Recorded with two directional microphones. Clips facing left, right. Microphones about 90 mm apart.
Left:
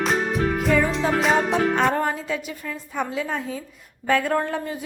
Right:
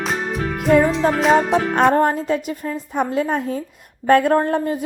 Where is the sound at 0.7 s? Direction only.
50° right (ahead or behind).